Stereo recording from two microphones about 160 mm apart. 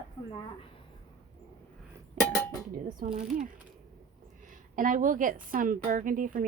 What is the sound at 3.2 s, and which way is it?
A woman's voice, 55° right (ahead or behind).